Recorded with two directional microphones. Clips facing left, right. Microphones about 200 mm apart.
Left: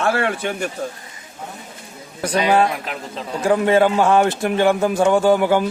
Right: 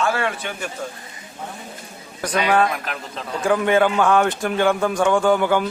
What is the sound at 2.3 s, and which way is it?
Speech, 30° left (ahead or behind).